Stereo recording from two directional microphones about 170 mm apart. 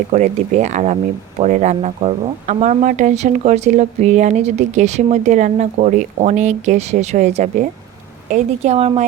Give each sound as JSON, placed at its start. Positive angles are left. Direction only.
{"t": 0.1, "sound": "speech", "side_deg": -45}